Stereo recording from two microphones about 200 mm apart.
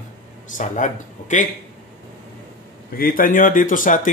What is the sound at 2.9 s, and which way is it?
A man's voice, 45° left (ahead or behind).